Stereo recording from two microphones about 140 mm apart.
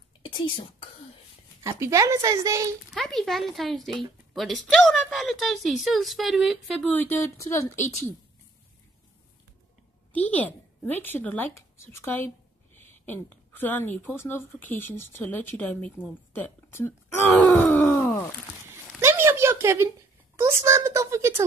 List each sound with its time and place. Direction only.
0.2 s whispering: 35° left (ahead or behind)
1.6 s speech: 20° right (ahead or behind)
2.9 s speech: centre (ahead or behind); by 7.6 s 20° left (ahead or behind)
10.1 s speech: 10° left (ahead or behind)
17.6 s groan: 15° left (ahead or behind)
18.7 s a sound: 15° right (ahead or behind)
20.3 s speech: 20° right (ahead or behind)